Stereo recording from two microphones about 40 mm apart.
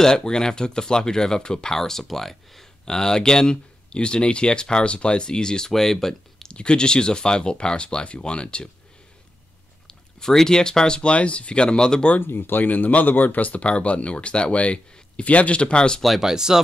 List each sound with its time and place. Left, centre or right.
0.0 s speech: centre
2.8 s speech: centre
5.7 s speech: centre
6.5 s speech: left
9.8 s speech: centre
12.2 s speech: left
16.2 s speech: centre